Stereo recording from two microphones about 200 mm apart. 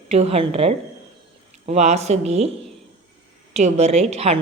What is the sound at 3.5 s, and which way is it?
Speech, 35° right (ahead or behind).